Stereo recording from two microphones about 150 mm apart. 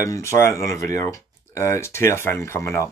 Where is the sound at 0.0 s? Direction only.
20° left (ahead or behind).